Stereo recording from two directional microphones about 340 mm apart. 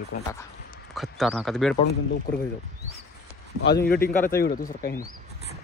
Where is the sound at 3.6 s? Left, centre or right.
Left.